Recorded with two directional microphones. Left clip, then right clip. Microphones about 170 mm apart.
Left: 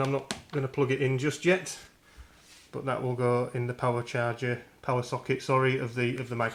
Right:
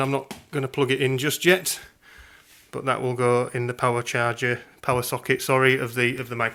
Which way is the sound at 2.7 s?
25° right (ahead or behind).